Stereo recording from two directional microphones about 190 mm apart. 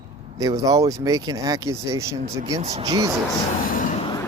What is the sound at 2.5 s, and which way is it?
Speech, 35° right (ahead or behind).